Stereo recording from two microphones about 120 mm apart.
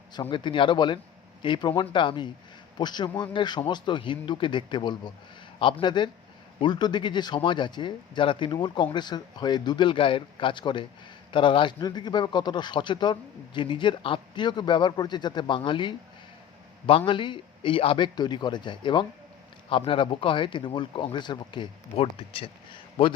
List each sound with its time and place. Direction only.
0.1 s a man's voice: 40° left (ahead or behind)
17.1 s a man's voice: 40° left (ahead or behind)